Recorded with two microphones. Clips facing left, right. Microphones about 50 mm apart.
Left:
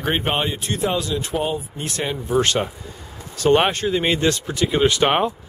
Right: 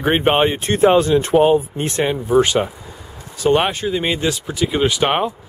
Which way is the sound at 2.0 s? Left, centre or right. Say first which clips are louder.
Right 4 dB; centre.